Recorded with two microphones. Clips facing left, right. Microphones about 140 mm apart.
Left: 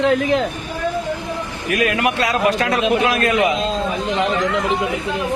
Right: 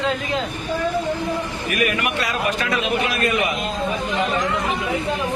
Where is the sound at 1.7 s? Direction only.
90° left.